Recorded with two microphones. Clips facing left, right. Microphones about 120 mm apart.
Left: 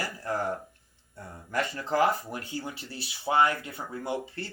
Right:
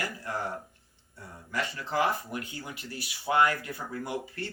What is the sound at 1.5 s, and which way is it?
Speech, 40° left (ahead or behind).